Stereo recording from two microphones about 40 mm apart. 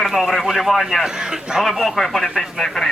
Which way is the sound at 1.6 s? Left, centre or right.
Centre.